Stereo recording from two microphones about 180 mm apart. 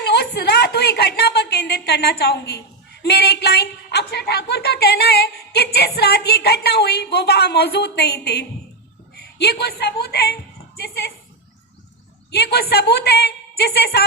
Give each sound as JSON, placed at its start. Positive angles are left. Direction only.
{"t": 0.0, "sound": "a woman's voice", "side_deg": 65}
{"t": 12.3, "sound": "a woman's voice", "side_deg": 65}